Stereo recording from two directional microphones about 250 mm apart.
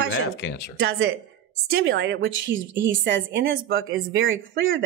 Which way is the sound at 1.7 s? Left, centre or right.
Right.